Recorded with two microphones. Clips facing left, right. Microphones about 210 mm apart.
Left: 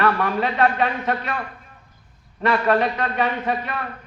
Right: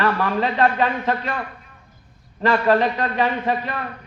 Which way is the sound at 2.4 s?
30° right (ahead or behind).